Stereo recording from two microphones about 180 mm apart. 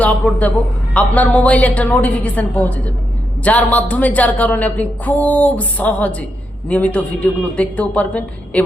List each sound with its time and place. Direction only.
0.0 s a woman's voice: 5° left (ahead or behind)